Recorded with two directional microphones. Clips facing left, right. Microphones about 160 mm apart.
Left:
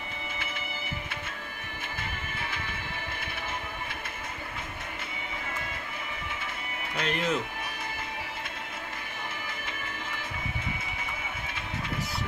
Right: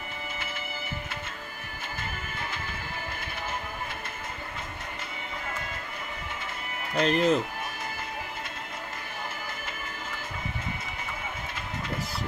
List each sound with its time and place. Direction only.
7.0 s speech: 35° right (ahead or behind)